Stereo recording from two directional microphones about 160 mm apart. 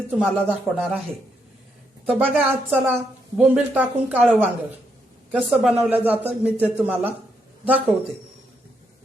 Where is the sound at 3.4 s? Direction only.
10° right (ahead or behind).